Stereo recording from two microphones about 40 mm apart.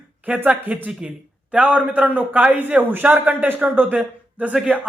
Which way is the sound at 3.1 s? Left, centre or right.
Right.